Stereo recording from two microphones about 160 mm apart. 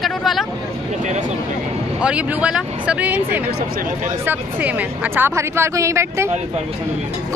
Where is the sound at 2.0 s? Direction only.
5° right (ahead or behind).